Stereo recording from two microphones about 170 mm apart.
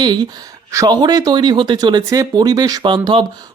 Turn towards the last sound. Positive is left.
turn(degrees=-30)  # may be behind; listen again after turning